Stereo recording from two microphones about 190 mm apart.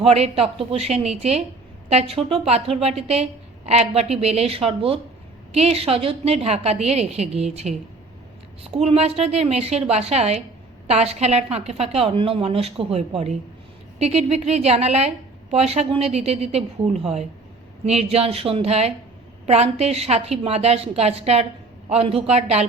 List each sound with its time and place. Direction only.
0.0 s a woman's voice: 30° right (ahead or behind)